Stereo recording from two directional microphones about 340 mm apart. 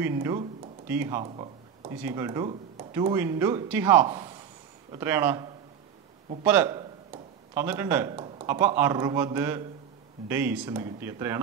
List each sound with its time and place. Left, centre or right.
0.0 s speech: centre